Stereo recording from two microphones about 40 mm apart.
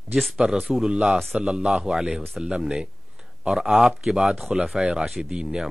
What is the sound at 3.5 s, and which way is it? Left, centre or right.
Speech, centre.